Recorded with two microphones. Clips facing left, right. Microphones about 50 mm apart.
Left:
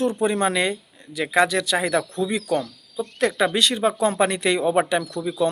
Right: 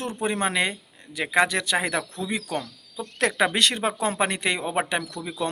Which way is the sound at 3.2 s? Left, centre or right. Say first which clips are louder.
Left 1 dB; right.